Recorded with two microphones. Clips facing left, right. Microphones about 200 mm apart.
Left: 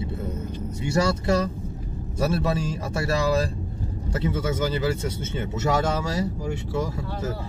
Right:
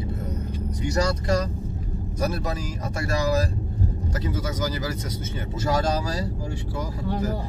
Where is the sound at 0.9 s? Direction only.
25° left (ahead or behind).